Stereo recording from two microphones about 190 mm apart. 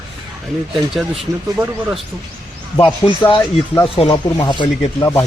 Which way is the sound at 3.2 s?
25° left (ahead or behind).